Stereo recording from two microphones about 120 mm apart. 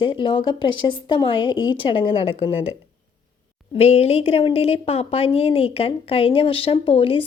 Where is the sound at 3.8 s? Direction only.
60° left (ahead or behind).